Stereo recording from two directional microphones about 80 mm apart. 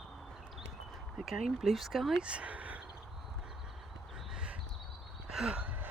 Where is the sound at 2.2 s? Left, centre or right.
Centre.